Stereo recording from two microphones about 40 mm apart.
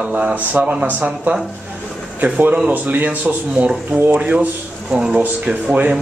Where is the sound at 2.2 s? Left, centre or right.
Right.